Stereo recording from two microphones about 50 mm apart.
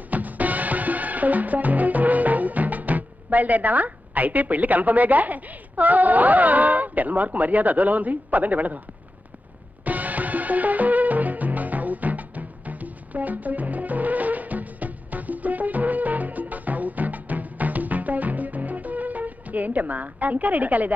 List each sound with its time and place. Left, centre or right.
0.1 s music: right
9.8 s music: right